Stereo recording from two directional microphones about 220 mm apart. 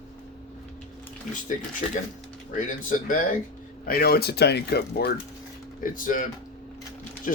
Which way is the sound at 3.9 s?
45° left (ahead or behind).